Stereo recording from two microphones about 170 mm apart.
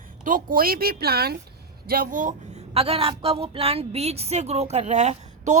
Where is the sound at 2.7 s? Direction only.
35° right (ahead or behind).